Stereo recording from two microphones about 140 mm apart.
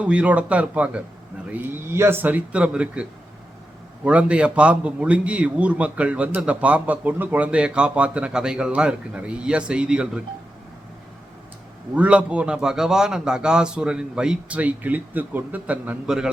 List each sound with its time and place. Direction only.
0.0 s a man's voice: 10° right (ahead or behind)
11.9 s a man's voice: 10° right (ahead or behind)